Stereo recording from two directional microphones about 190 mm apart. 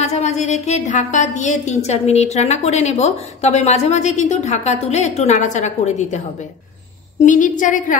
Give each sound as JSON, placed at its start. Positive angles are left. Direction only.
{"t": 0.0, "sound": "a woman's voice", "side_deg": 35}